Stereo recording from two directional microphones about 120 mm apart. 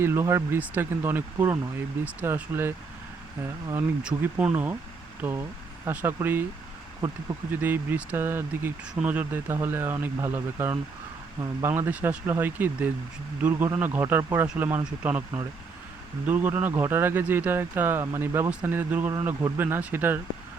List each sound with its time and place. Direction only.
0.0 s speech: 20° right (ahead or behind)
4.0 s speech: 10° right (ahead or behind)
7.5 s speech: 15° right (ahead or behind)
16.2 s speech: 15° right (ahead or behind)